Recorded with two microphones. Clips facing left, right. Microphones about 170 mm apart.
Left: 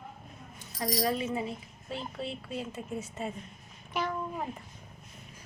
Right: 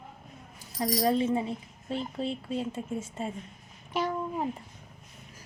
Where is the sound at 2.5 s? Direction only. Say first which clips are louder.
Right 4 dB; 25° right (ahead or behind).